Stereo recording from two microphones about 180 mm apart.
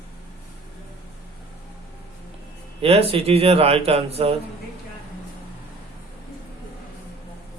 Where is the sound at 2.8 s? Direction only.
35° right (ahead or behind).